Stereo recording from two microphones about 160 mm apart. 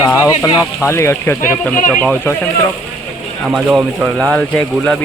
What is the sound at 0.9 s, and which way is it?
Speech, 15° left (ahead or behind).